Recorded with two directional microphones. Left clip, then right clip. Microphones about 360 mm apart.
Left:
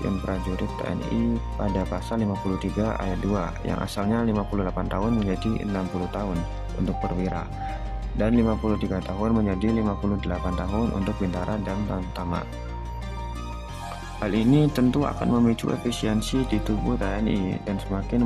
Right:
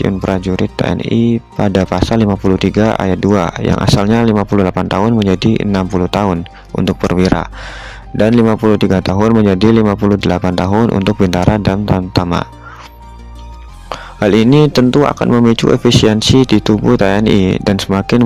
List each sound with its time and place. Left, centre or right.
0.3 s speech: right
14.2 s speech: right